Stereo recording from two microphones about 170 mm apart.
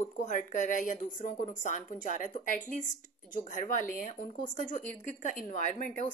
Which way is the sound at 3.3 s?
50° left (ahead or behind).